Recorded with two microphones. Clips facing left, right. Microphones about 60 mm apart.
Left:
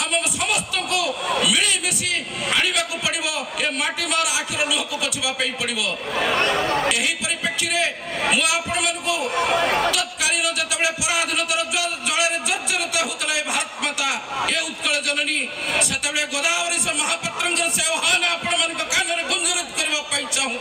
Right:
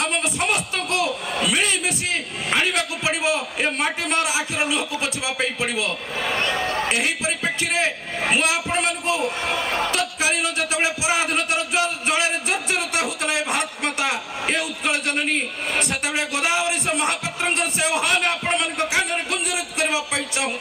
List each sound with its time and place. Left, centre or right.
0.0 s a man's voice: right
6.1 s speech: left
6.6 s speech: left
6.8 s a man's voice: right
9.6 s a sound: left
9.9 s a man's voice: right